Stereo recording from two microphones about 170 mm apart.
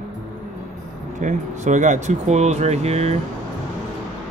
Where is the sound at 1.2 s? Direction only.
45° right (ahead or behind).